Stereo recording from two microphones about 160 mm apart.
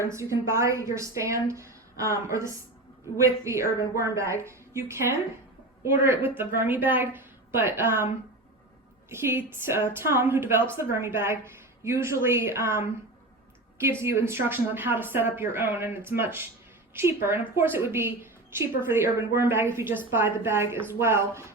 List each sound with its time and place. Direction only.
0.0 s a woman's voice: 20° right (ahead or behind)
9.0 s a woman's voice: 15° right (ahead or behind)
14.0 s a woman's voice: 15° right (ahead or behind)